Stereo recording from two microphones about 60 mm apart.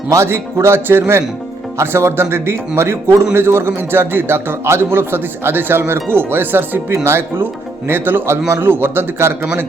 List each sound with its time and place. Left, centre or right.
0.3 s a man's voice: right